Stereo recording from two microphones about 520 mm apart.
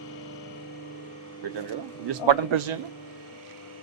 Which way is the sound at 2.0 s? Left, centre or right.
Right.